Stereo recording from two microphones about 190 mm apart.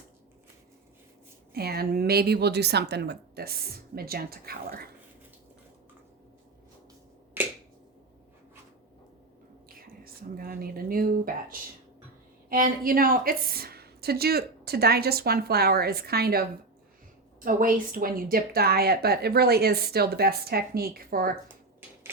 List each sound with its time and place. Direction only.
1.5 s a woman's voice: 55° right (ahead or behind)
9.6 s a woman's voice: 50° right (ahead or behind)